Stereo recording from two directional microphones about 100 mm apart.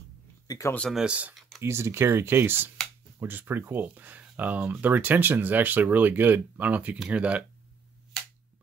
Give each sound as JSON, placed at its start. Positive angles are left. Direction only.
{"t": 0.5, "sound": "a sound", "side_deg": 35}
{"t": 0.9, "sound": "speech", "side_deg": -10}
{"t": 1.6, "sound": "speech", "side_deg": -25}